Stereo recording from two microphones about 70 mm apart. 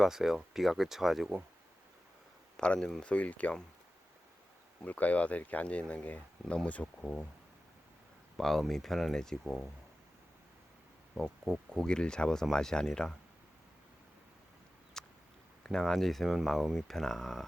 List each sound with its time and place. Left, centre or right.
0.0 s speech: centre
2.6 s speech: centre
4.9 s speech: left
8.4 s speech: centre
11.1 s speech: centre
15.0 s a sound: centre
15.6 s speech: centre